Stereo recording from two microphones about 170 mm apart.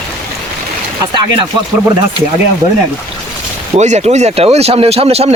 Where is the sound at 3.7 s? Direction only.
40° right (ahead or behind).